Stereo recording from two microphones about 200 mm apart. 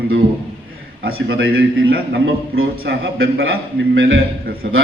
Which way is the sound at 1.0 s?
50° right (ahead or behind).